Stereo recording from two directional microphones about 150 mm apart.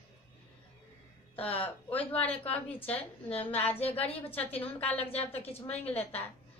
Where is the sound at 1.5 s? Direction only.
10° left (ahead or behind).